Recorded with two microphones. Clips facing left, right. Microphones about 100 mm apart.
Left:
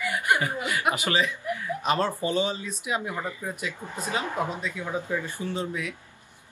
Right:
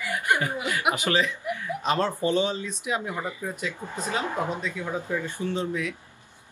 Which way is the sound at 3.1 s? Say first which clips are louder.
Right 1 dB; 10° right (ahead or behind).